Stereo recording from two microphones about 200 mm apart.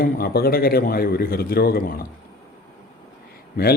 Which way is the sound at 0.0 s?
50° left (ahead or behind).